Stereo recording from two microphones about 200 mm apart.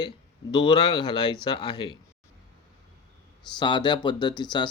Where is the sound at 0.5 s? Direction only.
20° left (ahead or behind).